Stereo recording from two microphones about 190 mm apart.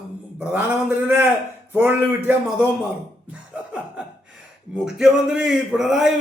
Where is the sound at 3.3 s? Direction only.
5° right (ahead or behind).